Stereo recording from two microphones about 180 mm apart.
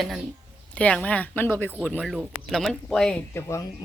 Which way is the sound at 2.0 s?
Centre (ahead or behind).